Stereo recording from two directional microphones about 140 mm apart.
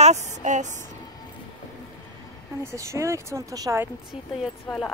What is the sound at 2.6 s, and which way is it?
Speech, 20° right (ahead or behind).